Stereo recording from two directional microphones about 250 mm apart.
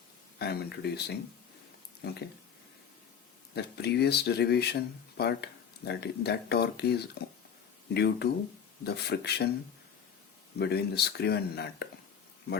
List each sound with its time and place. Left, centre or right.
0.3 s speech: left
3.5 s speech: left
10.6 s speech: left